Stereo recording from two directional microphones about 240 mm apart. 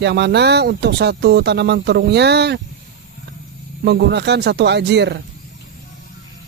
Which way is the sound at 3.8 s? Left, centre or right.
Right.